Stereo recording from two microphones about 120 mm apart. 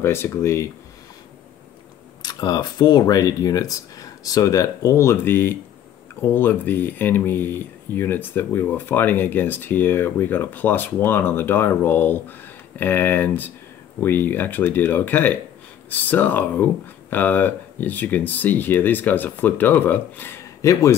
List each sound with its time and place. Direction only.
0.0 s speech: 20° left (ahead or behind)
2.2 s speech: 35° left (ahead or behind); by 20.3 s 15° left (ahead or behind)
20.6 s speech: 25° left (ahead or behind)